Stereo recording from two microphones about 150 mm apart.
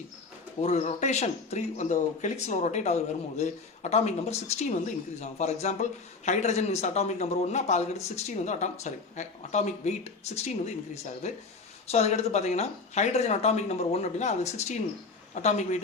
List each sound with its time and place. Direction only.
0.6 s speech: 50° left (ahead or behind)